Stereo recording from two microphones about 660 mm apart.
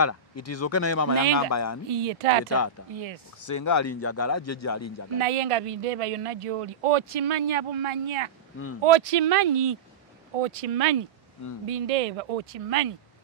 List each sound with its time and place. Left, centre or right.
0.0 s speech: left
1.9 s a man's voice: right
3.3 s speech: left
5.2 s a man's voice: right